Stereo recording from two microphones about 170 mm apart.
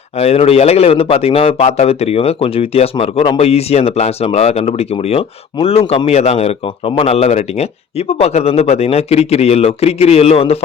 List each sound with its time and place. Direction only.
0.2 s a man's voice: 35° left (ahead or behind)